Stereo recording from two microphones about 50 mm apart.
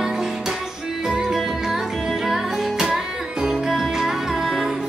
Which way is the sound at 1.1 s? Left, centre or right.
Centre.